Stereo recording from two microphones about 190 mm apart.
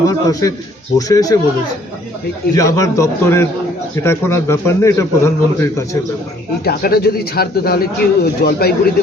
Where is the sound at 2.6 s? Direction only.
15° left (ahead or behind).